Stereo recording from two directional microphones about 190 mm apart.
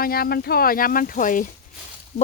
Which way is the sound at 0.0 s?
50° left (ahead or behind).